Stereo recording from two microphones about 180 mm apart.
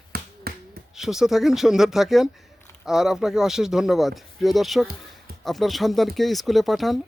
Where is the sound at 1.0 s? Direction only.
Centre (ahead or behind).